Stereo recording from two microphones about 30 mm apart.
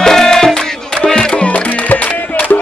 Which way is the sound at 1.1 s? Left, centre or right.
Left.